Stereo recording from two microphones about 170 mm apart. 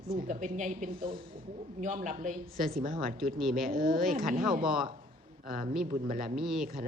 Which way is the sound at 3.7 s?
55° right (ahead or behind).